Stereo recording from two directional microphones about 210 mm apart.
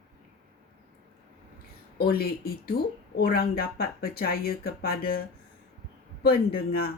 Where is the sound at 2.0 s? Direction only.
45° left (ahead or behind).